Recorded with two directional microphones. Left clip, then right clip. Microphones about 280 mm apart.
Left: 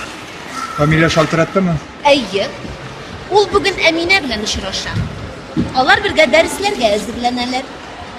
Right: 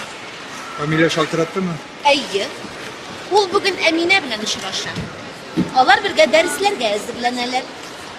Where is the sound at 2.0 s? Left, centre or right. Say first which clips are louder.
Left 4 dB; centre.